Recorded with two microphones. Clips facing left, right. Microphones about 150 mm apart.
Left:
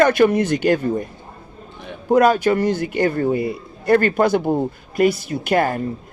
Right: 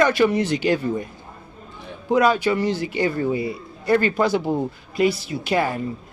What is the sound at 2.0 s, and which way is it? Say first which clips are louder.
A man's voice: left 4 dB; 50° left (ahead or behind).